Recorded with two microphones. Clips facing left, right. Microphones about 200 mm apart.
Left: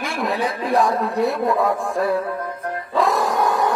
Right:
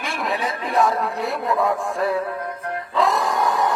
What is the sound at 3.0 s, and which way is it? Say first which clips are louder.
Music: left 2 dB; centre (ahead or behind).